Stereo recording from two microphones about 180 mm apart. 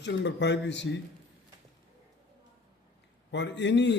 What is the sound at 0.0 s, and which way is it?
Speech, 80° left.